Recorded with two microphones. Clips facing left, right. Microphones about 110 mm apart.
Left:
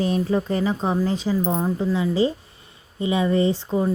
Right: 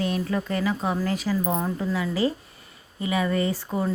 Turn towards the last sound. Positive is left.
turn(degrees=25)  # may be behind; listen again after turning